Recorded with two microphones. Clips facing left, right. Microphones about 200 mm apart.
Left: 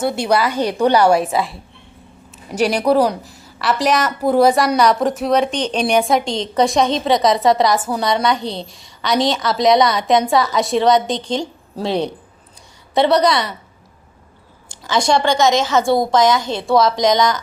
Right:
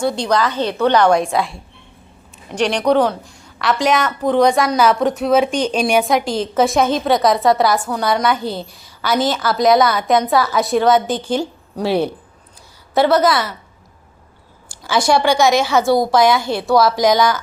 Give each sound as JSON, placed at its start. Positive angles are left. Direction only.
{"t": 0.0, "sound": "a woman's voice", "side_deg": 5}
{"t": 14.7, "sound": "a woman's voice", "side_deg": -5}
{"t": 16.4, "sound": "a woman's voice", "side_deg": 20}
{"t": 16.6, "sound": "a woman's voice", "side_deg": -5}